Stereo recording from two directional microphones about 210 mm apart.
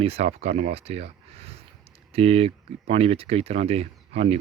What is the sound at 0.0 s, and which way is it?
Speech, 30° right (ahead or behind).